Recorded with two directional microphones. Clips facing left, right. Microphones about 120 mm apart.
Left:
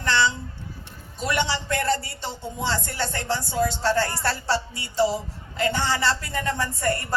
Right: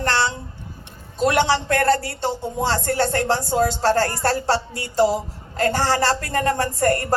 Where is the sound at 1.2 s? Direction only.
55° right (ahead or behind).